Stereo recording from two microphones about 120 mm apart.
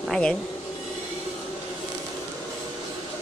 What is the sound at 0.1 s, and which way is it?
Speech, 5° left (ahead or behind).